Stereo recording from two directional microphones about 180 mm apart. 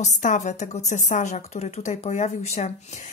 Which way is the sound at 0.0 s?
45° left (ahead or behind).